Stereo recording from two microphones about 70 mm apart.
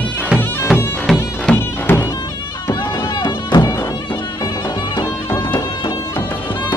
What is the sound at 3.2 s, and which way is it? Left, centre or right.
Music, left.